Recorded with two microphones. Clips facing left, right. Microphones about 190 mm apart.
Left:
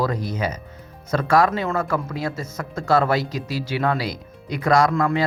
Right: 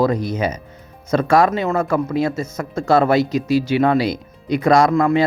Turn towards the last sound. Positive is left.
turn(degrees=-20)  # may be behind; listen again after turning